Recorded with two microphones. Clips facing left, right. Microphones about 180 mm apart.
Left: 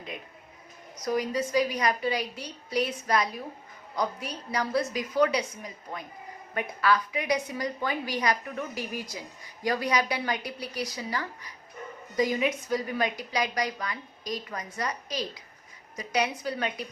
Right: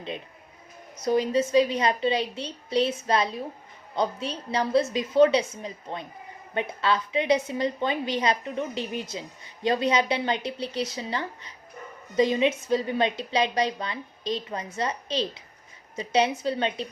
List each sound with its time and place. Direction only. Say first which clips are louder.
1.0 s a woman's voice: right 5 dB; 25° right (ahead or behind)